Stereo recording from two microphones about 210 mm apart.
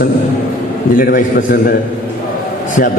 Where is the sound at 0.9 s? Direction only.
40° left (ahead or behind).